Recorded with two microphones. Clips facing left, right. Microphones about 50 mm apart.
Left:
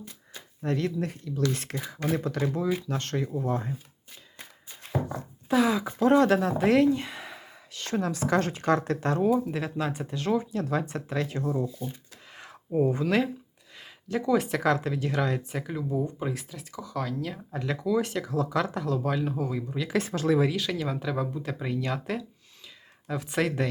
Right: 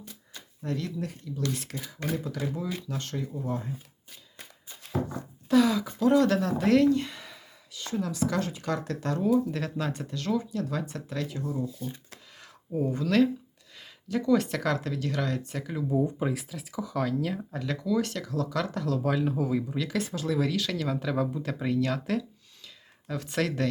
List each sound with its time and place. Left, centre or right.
0.6 s speech: left
5.0 s a sound: left
6.0 s speech: left
7.7 s a sound: left
8.0 s speech: left
9.3 s speech: centre; by 11.4 s left
12.3 s a sound: left
12.8 s speech: left; by 17.4 s centre
17.7 s speech: centre
19.0 s speech: centre
19.9 s speech: left
20.6 s speech: centre